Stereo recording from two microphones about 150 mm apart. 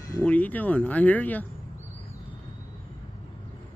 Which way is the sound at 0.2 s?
10° left (ahead or behind).